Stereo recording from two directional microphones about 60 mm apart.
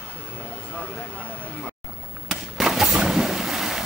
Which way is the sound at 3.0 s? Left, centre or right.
Centre.